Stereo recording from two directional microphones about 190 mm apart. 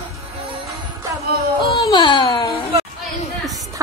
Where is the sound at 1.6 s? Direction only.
25° left (ahead or behind).